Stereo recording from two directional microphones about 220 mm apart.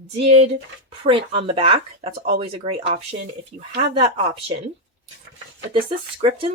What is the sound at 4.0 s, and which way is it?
Speech, 25° right (ahead or behind).